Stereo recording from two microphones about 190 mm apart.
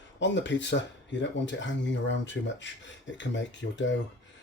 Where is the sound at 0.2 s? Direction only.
70° left (ahead or behind).